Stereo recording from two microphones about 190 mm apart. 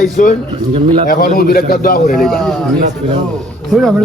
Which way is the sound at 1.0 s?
50° left (ahead or behind).